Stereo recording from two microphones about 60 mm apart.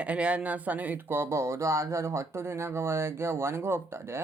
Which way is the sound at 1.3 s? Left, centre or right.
Right.